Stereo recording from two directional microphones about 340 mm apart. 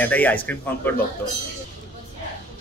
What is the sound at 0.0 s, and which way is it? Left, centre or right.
Speech, centre.